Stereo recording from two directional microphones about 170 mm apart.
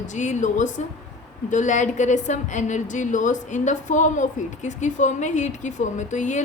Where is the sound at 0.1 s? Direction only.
45° left (ahead or behind).